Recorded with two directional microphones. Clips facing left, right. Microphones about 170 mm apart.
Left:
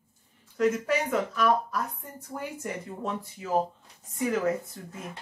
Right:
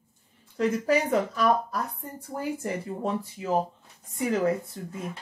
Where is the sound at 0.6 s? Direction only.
35° right (ahead or behind).